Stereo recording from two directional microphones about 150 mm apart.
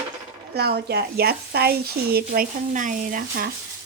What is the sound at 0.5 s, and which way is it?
Speech, 90° right.